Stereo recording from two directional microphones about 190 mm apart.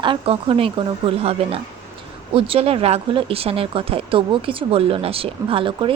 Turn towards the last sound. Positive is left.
turn(degrees=-25)  # may be behind; listen again after turning